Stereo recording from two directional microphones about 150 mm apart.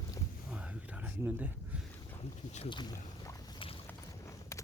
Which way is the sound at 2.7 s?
30° left (ahead or behind).